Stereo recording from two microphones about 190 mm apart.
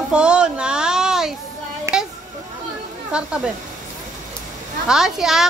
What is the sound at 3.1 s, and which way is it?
Speech, 5° right (ahead or behind).